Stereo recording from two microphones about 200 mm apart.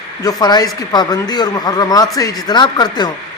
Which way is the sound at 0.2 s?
20° left (ahead or behind).